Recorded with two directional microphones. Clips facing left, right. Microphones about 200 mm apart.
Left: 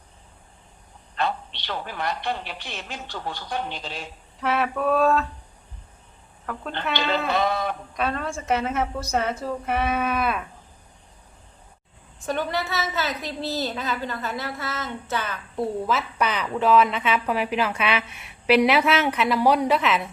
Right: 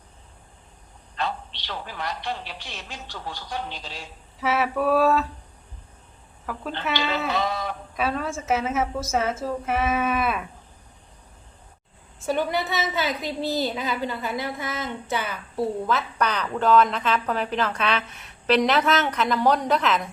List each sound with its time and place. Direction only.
1.1 s speech: 55° left (ahead or behind)
4.4 s a woman's voice: 5° right (ahead or behind)
6.4 s a woman's voice: 5° right (ahead or behind)
7.3 s sheep: 55° left (ahead or behind)
7.9 s a woman's voice: 5° right (ahead or behind)
12.2 s a woman's voice: 10° right (ahead or behind); by 20.1 s 5° left (ahead or behind)